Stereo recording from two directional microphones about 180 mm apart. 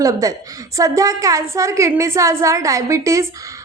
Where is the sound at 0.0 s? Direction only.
20° right (ahead or behind).